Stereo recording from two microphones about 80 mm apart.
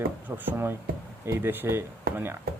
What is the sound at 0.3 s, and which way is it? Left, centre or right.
Speech, right.